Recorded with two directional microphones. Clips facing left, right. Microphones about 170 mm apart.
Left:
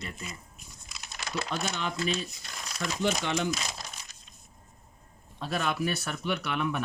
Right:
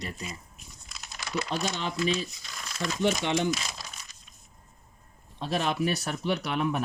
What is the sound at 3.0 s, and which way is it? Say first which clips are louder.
Speech: right 3 dB; 20° right (ahead or behind).